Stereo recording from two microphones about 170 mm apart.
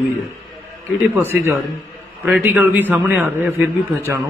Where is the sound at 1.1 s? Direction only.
10° right (ahead or behind).